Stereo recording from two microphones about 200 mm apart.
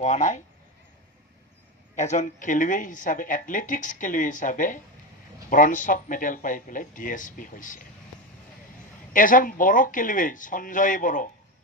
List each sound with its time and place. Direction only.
0.0 s speech: 35° left (ahead or behind)
2.0 s speech: 40° left (ahead or behind)
9.1 s speech: 40° left (ahead or behind)